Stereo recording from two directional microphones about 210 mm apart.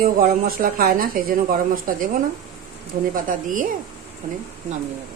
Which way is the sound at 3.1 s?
40° right (ahead or behind).